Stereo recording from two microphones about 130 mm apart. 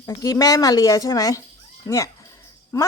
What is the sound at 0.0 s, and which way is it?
Speech, 25° left (ahead or behind).